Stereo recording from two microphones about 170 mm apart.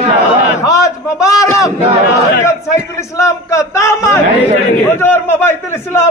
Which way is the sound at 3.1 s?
20° left (ahead or behind).